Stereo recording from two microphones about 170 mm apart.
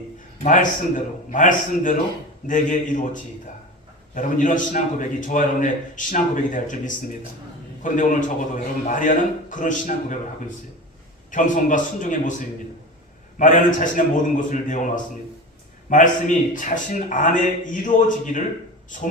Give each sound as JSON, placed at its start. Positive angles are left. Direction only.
{"t": 0.4, "sound": "a man's voice", "side_deg": 50}
{"t": 11.3, "sound": "a man's voice", "side_deg": 50}
{"t": 13.4, "sound": "a man's voice", "side_deg": 50}
{"t": 15.9, "sound": "a man's voice", "side_deg": 50}